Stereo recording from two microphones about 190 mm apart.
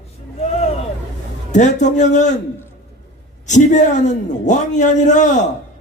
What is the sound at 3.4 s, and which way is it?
Hoot, 40° left (ahead or behind).